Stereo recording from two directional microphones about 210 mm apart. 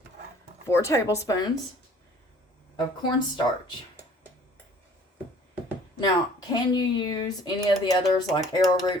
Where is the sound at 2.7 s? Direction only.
20° left (ahead or behind).